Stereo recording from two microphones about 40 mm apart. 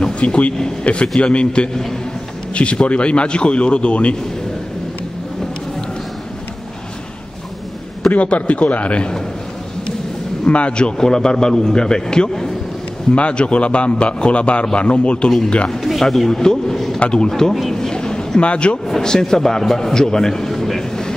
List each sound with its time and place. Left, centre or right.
0.0 s a sound: left
1.0 s a man's voice: left
8.1 s a man's voice: left
10.4 s a man's voice: left
11.0 s a man's voice: centre
15.8 s a man's voice: centre
17.0 s a man's voice: left
17.3 s a man's voice: centre
17.7 s a sound: centre
18.9 s a man's voice: centre